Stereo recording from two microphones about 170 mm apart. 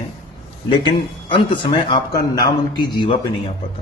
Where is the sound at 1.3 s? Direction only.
30° left (ahead or behind).